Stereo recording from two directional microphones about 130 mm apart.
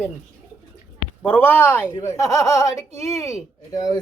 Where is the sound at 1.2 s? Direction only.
15° left (ahead or behind).